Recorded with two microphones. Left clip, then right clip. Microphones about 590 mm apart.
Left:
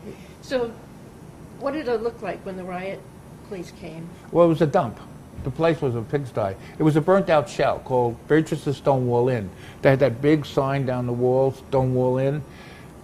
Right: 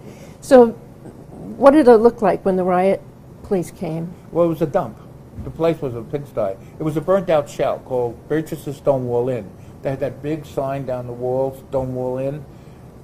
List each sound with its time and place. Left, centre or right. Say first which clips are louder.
1.6 s a woman's voice: right 15 dB; right
4.4 s a man's voice: even; left
9.8 s speech: left 6 dB; left